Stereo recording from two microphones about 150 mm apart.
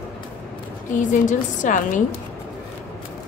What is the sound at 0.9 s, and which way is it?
A woman's voice, 60° left (ahead or behind).